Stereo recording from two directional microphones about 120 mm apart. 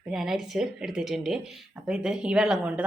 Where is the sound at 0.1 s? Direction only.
Centre (ahead or behind).